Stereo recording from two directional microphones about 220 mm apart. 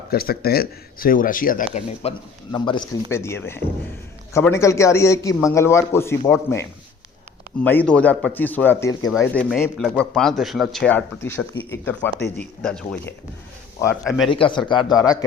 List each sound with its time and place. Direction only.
0.1 s speech: 45° left (ahead or behind)
2.0 s a man's voice: 25° left (ahead or behind)
7.6 s a man's voice: 10° left (ahead or behind)
9.0 s speech: 5° left (ahead or behind)
14.3 s a man's voice: 25° left (ahead or behind)